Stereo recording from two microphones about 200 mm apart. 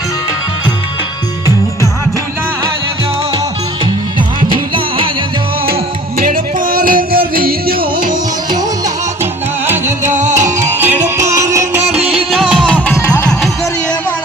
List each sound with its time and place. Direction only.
4.4 s music: 25° right (ahead or behind)
6.1 s music: 45° right (ahead or behind)
9.6 s music: 10° right (ahead or behind)
10.0 s music: 35° right (ahead or behind)
10.6 s music: 10° right (ahead or behind); by 13.3 s 15° left (ahead or behind)